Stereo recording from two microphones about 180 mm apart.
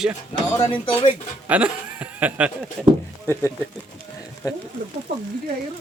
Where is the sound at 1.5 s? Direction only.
10° right (ahead or behind).